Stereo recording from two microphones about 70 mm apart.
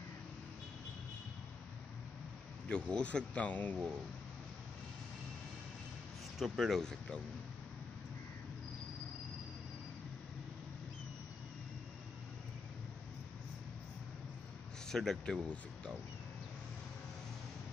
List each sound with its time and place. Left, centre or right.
2.7 s speech: centre
6.3 s speech: centre
6.8 s speech: centre
14.9 s speech: centre
15.3 s speech: centre